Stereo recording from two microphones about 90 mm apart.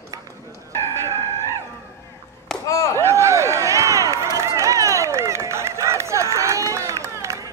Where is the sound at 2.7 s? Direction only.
35° left (ahead or behind).